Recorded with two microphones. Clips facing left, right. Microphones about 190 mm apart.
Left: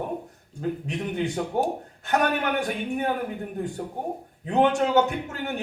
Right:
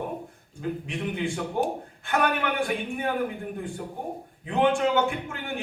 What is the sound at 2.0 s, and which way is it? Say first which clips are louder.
A man's voice: left 2 dB; 40° left (ahead or behind).